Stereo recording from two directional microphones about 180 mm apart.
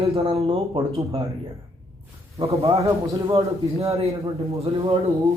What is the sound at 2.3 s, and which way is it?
Speech, 15° right (ahead or behind).